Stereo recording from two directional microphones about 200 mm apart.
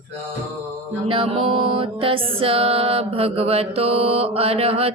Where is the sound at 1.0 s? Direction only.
25° right (ahead or behind).